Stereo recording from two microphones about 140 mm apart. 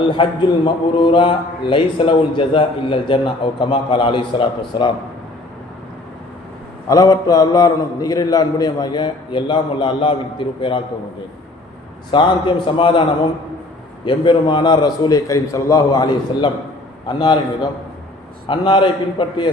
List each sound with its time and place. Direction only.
0.0 s a man's voice: 35° left (ahead or behind)
6.8 s a man's voice: 25° left (ahead or behind)
12.1 s a man's voice: 35° left (ahead or behind)